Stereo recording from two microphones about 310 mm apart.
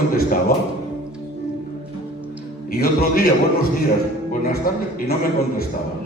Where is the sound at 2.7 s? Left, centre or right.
Left.